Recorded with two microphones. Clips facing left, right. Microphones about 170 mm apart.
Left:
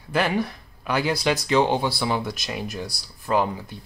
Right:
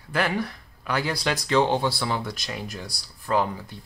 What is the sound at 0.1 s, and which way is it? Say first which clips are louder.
Speech: left 3 dB; 15° left (ahead or behind).